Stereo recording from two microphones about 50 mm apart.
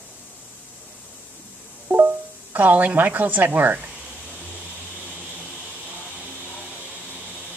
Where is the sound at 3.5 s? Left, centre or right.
Right.